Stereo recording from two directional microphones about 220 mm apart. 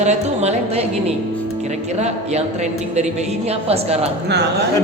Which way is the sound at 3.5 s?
30° right (ahead or behind).